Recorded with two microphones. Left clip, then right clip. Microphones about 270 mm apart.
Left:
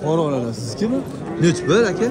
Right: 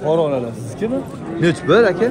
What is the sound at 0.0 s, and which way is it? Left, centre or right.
Speech, left.